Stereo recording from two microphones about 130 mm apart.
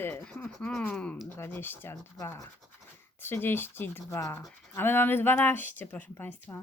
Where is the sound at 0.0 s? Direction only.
15° left (ahead or behind).